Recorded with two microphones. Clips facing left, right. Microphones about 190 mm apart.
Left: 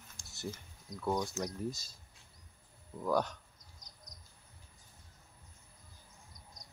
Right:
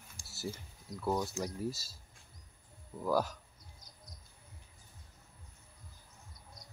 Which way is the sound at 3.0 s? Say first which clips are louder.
Even; 5° right (ahead or behind).